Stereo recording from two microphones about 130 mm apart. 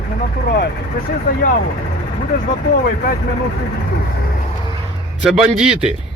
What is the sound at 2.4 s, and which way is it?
Speech, 90° left.